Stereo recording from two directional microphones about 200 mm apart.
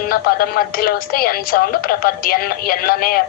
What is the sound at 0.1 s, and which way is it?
Speech, 45° left (ahead or behind).